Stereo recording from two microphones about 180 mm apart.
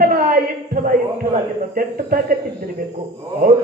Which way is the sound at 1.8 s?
50° right (ahead or behind).